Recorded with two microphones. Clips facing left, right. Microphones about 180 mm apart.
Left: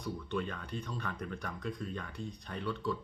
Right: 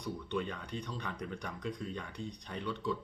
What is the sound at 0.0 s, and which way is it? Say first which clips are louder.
Speech: even; 15° right (ahead or behind).